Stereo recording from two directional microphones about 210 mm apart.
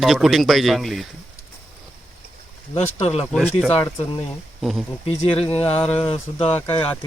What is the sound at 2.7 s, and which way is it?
Speech, 30° left (ahead or behind).